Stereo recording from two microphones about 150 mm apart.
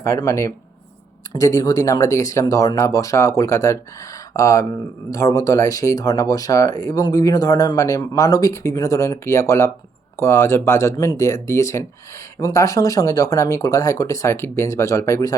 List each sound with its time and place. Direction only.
0.0 s speech: 20° left (ahead or behind)